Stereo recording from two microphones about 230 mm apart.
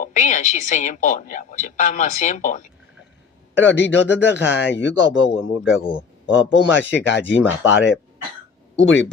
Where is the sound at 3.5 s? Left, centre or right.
Left.